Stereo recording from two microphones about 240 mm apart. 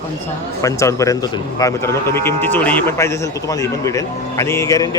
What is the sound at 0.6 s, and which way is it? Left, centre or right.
Speech, centre.